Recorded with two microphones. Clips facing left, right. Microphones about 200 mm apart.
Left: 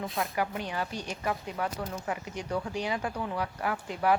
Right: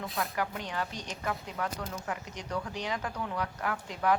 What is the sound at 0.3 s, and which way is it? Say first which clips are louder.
Speech: left 2 dB; 10° left (ahead or behind).